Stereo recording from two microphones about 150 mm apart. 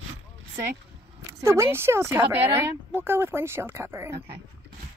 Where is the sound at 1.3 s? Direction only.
20° right (ahead or behind).